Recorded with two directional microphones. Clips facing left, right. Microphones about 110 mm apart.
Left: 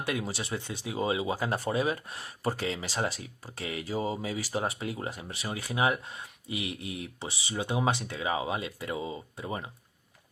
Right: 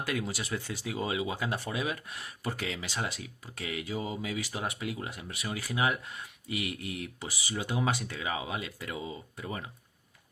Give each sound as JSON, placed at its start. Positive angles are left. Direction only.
{"t": 0.0, "sound": "speech", "side_deg": 25}